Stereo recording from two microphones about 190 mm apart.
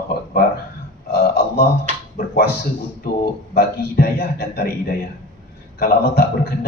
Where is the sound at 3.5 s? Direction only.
55° left (ahead or behind).